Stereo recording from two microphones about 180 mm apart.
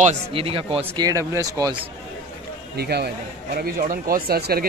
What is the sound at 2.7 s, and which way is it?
Speech, 60° right (ahead or behind).